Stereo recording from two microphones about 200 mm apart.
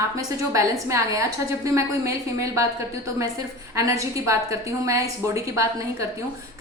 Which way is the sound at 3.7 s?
15° right (ahead or behind).